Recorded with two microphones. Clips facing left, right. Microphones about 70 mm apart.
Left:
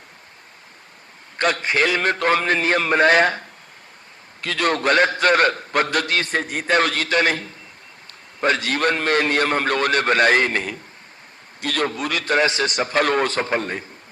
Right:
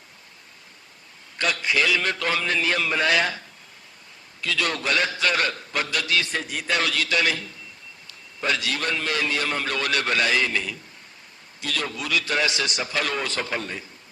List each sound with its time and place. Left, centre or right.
1.4 s a man's voice: left